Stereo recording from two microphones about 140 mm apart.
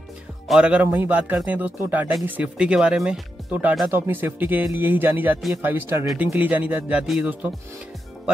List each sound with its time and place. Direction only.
0.5 s a man's voice: 5° right (ahead or behind)